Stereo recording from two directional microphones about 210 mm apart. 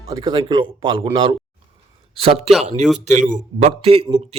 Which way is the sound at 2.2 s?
25° right (ahead or behind).